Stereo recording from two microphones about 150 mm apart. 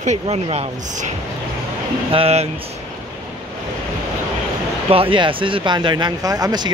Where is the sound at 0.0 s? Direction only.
45° right (ahead or behind).